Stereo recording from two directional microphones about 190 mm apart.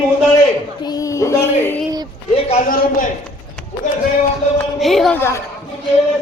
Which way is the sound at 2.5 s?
40° left (ahead or behind).